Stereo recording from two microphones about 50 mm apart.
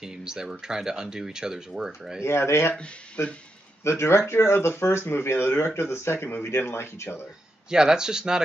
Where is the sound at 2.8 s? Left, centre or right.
Left.